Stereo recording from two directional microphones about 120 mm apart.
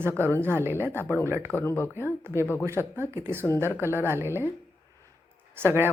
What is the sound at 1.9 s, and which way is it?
Speech, 20° right (ahead or behind).